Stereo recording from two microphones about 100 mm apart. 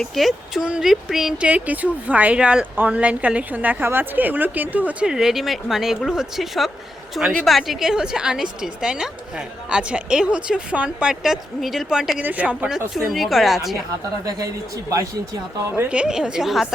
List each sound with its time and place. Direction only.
0.0 s speech: centre (ahead or behind)
14.3 s speech: 35° right (ahead or behind)
15.7 s speech: 15° right (ahead or behind)